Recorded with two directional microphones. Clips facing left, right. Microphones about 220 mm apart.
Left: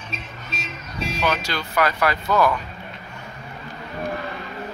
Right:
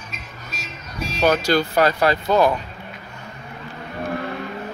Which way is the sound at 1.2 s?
40° right (ahead or behind).